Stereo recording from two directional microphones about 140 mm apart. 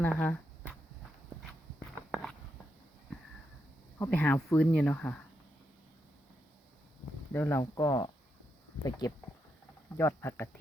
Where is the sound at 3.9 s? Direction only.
10° left (ahead or behind).